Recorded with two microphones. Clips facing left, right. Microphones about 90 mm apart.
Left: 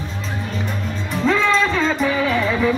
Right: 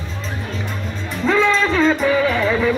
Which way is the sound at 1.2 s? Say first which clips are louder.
Right 1 dB; centre (ahead or behind).